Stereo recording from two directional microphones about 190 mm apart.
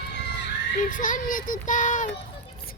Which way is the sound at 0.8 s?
45° left (ahead or behind).